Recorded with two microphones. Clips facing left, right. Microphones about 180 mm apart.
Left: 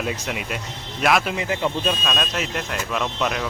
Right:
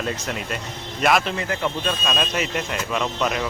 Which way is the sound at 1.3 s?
15° left (ahead or behind).